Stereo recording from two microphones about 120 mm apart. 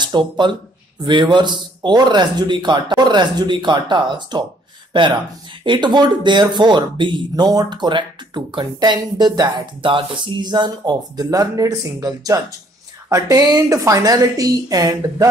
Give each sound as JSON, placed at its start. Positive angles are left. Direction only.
{"t": 0.0, "sound": "speech", "side_deg": -40}